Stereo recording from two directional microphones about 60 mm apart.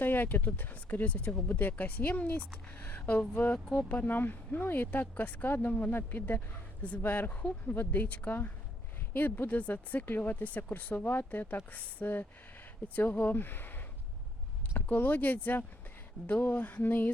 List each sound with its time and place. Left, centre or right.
0.0 s speech: left
9.1 s speech: left